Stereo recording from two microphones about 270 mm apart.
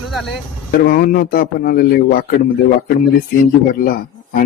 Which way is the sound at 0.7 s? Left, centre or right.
Left.